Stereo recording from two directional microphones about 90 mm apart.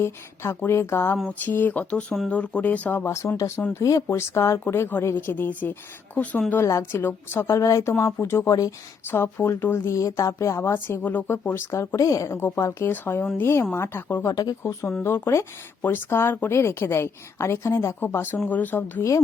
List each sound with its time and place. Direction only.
0.0 s speech: 30° left (ahead or behind)
3.1 s a woman's voice: 30° left (ahead or behind)
3.8 s a woman's voice: 35° left (ahead or behind)
9.0 s a woman's voice: 30° left (ahead or behind)
12.9 s speech: 25° left (ahead or behind)
14.3 s speech: 45° left (ahead or behind)
14.6 s a woman's voice: 30° left (ahead or behind)